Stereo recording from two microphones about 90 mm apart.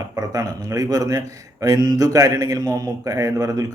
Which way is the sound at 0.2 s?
40° right (ahead or behind).